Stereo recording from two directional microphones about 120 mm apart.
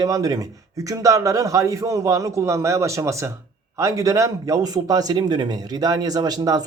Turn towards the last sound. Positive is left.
turn(degrees=-35)  # may be behind; listen again after turning